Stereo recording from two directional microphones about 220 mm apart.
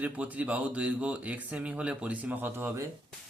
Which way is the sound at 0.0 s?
5° right (ahead or behind).